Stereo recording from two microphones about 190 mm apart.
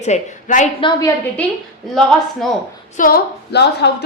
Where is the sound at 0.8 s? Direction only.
25° left (ahead or behind).